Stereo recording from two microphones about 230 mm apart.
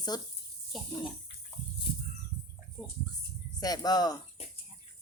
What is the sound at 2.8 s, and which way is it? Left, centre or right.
Speech, centre.